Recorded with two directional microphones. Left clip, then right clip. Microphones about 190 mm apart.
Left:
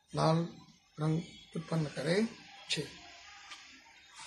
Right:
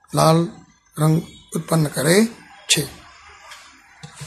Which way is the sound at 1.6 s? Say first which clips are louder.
Right 16 dB; 40° right (ahead or behind).